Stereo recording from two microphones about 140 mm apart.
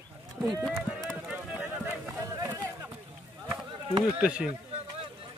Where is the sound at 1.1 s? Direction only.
10° right (ahead or behind).